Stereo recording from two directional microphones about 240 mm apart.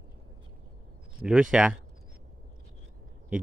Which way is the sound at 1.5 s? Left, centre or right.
Centre.